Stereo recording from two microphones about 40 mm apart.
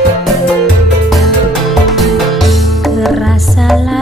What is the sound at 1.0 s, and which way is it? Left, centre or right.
Music, centre.